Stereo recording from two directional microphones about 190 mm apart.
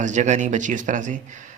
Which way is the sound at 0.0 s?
40° right (ahead or behind).